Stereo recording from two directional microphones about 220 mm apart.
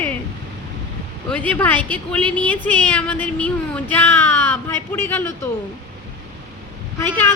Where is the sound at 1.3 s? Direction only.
5° left (ahead or behind).